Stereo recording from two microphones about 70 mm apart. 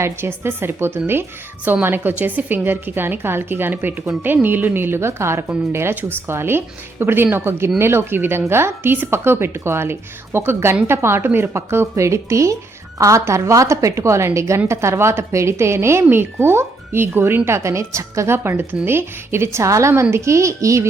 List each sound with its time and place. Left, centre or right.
0.0 s a woman's voice: right
11.5 s a woman's voice: right
19.9 s a woman's voice: right